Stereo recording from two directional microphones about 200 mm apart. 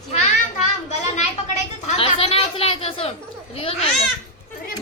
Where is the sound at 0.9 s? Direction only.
35° left (ahead or behind).